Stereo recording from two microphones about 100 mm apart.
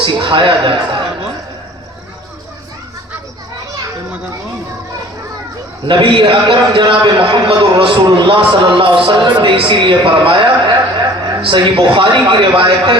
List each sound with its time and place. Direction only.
0.0 s a man's voice: 55° right (ahead or behind)
5.9 s a man's voice: 55° right (ahead or behind)